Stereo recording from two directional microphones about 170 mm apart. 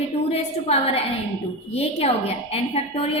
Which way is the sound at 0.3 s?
35° left (ahead or behind).